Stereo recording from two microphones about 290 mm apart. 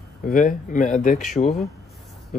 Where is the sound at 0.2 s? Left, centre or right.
Left.